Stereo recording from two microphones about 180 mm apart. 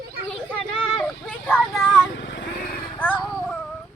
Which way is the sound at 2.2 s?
85° left.